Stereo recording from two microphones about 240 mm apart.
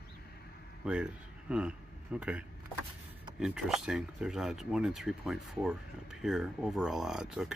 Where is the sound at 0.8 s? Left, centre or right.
Centre.